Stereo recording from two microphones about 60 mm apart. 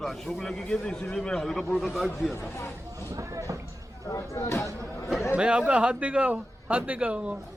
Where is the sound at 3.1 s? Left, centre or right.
Right.